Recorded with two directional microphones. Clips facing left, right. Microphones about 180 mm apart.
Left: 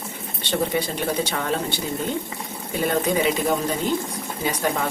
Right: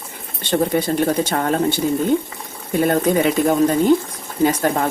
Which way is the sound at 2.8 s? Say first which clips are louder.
Right 5 dB; 50° right (ahead or behind).